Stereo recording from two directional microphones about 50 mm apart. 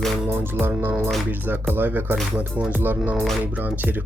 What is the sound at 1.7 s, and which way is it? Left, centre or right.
Music, right.